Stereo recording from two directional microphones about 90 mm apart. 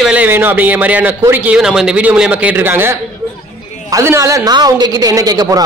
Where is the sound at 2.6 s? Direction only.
25° right (ahead or behind).